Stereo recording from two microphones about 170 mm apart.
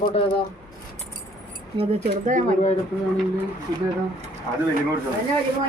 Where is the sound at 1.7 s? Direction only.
45° right (ahead or behind).